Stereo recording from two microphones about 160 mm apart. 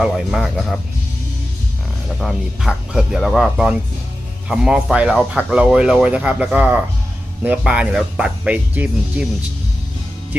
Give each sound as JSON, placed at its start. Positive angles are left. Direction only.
{"t": 0.0, "sound": "speech", "side_deg": 0}
{"t": 2.2, "sound": "speech", "side_deg": -5}